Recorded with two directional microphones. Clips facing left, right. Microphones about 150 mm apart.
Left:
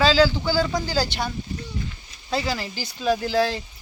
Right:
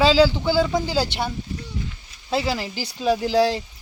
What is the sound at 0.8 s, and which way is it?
Speech, 25° right (ahead or behind).